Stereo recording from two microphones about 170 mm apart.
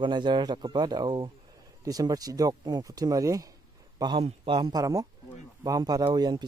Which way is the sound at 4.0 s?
30° right (ahead or behind).